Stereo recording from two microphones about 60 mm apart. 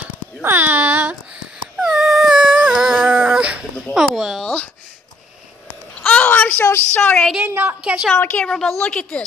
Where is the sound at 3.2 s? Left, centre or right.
Centre.